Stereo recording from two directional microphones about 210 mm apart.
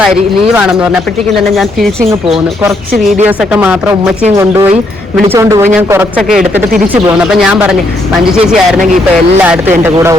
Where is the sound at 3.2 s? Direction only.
5° right (ahead or behind).